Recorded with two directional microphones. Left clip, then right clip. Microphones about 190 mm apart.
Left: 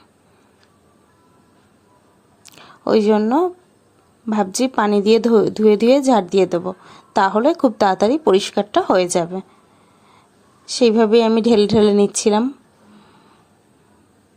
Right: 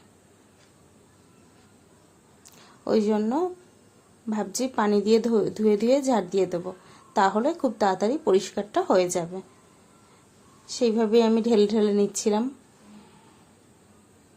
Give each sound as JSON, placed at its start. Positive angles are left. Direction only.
{"t": 2.5, "sound": "speech", "side_deg": 35}
{"t": 10.7, "sound": "speech", "side_deg": 35}